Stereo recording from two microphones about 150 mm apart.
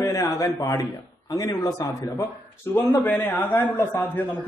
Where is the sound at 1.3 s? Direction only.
25° left (ahead or behind).